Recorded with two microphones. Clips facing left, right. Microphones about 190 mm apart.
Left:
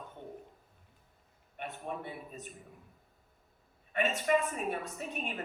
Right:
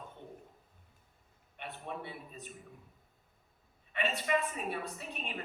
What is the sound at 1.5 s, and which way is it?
Speech, 45° left (ahead or behind).